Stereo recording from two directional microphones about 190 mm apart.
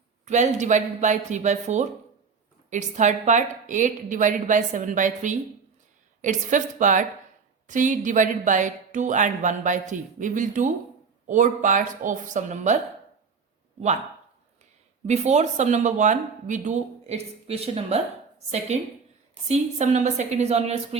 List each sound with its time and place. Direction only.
0.3 s speech: 40° right (ahead or behind)
15.0 s speech: 35° right (ahead or behind)